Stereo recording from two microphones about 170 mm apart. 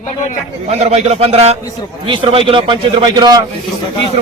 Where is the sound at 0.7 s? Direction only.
40° right (ahead or behind); by 3.4 s 25° right (ahead or behind).